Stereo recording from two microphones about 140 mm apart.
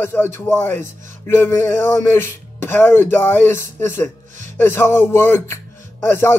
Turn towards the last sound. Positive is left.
turn(degrees=15)  # may be behind; listen again after turning